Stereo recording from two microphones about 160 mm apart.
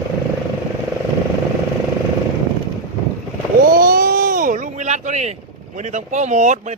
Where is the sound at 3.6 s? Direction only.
65° right (ahead or behind); by 5.3 s 45° right (ahead or behind).